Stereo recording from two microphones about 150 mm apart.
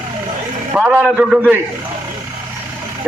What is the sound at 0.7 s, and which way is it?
Speech, 10° right (ahead or behind).